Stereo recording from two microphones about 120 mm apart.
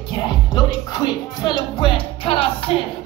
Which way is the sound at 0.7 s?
35° left (ahead or behind).